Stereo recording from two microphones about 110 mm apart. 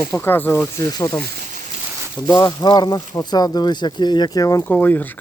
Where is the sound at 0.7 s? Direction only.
35° left (ahead or behind).